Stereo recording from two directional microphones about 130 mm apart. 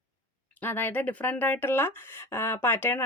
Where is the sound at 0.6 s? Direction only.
15° left (ahead or behind).